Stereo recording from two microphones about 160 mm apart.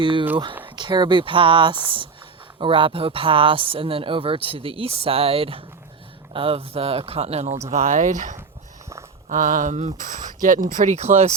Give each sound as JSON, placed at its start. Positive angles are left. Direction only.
{"t": 0.0, "sound": "speech", "side_deg": -30}